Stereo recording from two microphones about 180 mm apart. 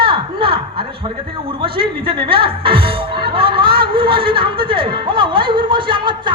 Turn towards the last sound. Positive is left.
turn(degrees=-25)  # may be behind; listen again after turning